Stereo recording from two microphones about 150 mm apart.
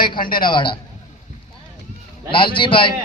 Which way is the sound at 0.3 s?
30° left (ahead or behind).